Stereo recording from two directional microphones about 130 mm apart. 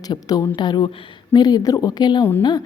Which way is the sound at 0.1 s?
30° left (ahead or behind).